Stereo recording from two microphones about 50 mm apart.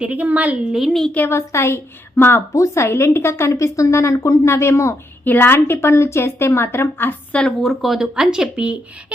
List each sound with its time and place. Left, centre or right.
0.0 s a woman's voice: right
0.7 s speech: centre
1.3 s a woman's voice: left
2.5 s a woman's voice: left
2.8 s a woman's voice: left
5.2 s a woman's voice: left
7.6 s speech: centre
8.0 s speech: centre